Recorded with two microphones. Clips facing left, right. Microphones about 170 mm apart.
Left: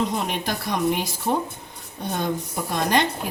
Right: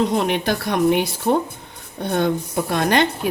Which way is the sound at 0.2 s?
65° right (ahead or behind).